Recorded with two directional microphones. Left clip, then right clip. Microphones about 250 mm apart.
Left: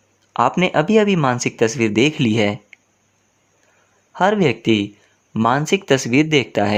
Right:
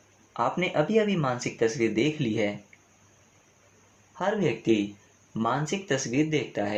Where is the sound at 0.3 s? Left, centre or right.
Left.